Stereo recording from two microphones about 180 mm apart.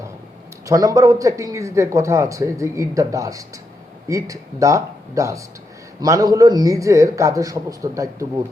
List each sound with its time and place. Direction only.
0.6 s a man's voice: 20° right (ahead or behind)